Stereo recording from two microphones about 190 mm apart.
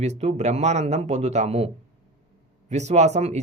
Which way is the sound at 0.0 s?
35° right (ahead or behind).